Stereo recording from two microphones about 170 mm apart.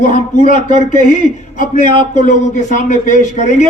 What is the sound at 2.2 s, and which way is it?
A man's voice, 45° left (ahead or behind).